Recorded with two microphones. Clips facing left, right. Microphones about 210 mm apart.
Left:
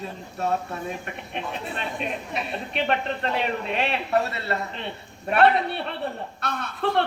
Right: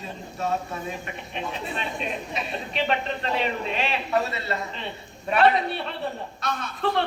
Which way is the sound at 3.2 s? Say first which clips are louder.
Right 1 dB; 60° left (ahead or behind).